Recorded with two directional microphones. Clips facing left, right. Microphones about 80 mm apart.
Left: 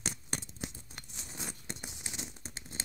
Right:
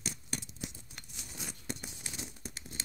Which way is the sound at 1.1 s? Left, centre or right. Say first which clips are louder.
Left 2 dB; left.